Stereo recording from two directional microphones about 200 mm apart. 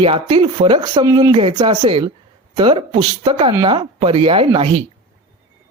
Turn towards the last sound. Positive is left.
turn(degrees=-25)  # may be behind; listen again after turning